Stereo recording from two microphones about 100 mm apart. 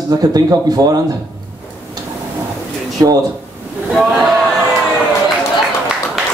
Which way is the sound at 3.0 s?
35° right (ahead or behind).